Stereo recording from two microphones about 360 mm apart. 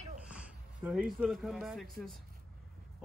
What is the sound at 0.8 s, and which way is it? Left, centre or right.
A woman's voice, centre.